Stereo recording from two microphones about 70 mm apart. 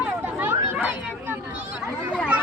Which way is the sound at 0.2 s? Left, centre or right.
Right.